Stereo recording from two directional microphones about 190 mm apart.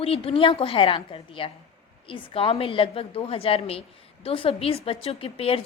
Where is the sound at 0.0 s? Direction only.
30° left (ahead or behind).